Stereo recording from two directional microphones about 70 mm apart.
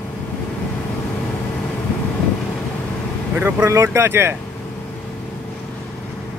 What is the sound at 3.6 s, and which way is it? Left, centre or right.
Speech, right.